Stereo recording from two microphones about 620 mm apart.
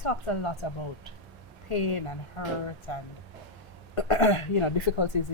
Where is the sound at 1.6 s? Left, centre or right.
Left.